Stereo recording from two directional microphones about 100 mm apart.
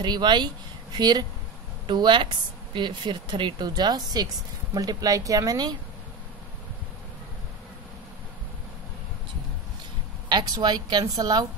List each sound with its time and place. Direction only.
0.0 s a woman's voice: 45° right (ahead or behind)
10.2 s a woman's voice: 45° right (ahead or behind)